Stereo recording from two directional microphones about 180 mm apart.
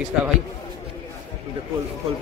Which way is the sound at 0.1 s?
5° right (ahead or behind).